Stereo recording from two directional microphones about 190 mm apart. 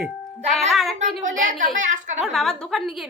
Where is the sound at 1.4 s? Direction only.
45° right (ahead or behind).